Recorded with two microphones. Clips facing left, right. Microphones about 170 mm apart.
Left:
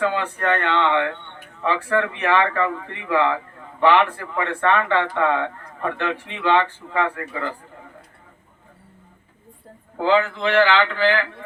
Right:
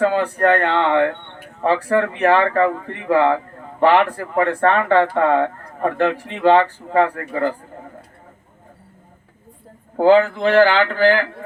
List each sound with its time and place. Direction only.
0.0 s speech: 40° right (ahead or behind)
10.0 s speech: 45° right (ahead or behind)